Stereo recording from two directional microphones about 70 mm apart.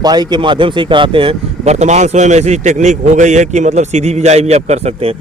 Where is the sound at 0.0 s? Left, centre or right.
Right.